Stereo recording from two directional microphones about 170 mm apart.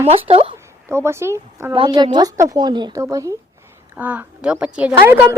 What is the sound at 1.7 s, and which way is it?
A woman's voice, 30° right (ahead or behind).